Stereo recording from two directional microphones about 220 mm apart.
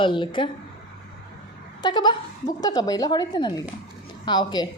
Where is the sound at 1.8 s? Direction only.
20° left (ahead or behind).